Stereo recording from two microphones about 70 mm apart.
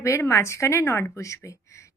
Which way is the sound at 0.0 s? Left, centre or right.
Left.